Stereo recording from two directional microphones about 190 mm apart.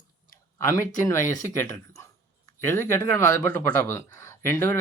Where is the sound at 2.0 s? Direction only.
15° left (ahead or behind).